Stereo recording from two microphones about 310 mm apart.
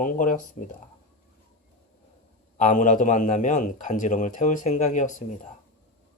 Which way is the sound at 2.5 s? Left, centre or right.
Left.